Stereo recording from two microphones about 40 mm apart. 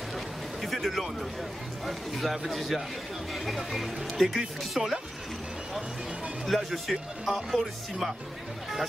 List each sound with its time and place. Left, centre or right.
0.6 s a sound: centre
1.9 s speech: centre
6.4 s speech: centre